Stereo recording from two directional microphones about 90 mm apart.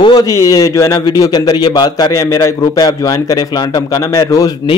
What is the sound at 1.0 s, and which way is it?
A man's voice, 45° left (ahead or behind).